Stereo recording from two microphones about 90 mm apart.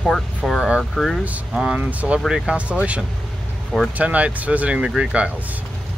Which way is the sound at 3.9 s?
15° right (ahead or behind).